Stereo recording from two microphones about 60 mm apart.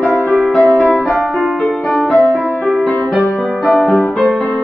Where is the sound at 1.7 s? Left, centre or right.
Centre.